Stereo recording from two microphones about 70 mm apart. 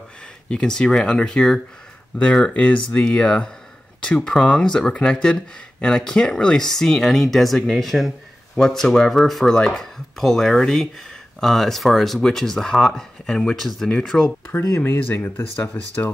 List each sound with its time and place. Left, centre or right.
0.5 s speech: centre
14.5 s speech: left